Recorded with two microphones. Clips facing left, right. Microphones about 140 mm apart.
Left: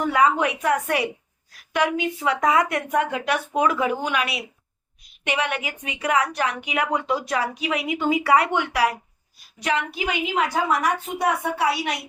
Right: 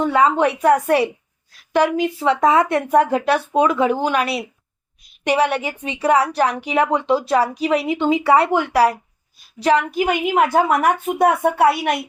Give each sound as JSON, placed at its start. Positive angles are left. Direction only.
{"t": 0.0, "sound": "a woman's voice", "side_deg": -25}